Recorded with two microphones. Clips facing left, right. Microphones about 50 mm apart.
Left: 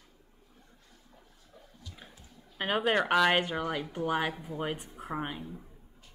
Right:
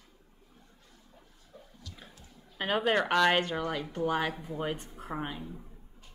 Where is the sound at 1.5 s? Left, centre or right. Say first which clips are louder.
Right 3 dB; right.